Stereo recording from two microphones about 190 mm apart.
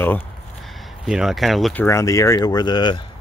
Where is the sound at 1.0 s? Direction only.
5° right (ahead or behind).